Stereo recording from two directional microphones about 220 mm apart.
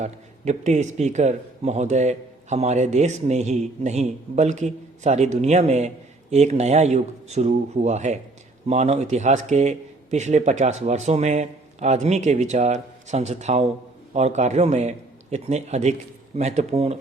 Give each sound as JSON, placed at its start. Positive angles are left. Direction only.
{"t": 0.0, "sound": "a man's voice", "side_deg": -30}